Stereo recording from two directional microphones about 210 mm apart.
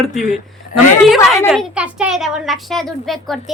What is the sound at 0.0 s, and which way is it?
Speech, 5° right (ahead or behind).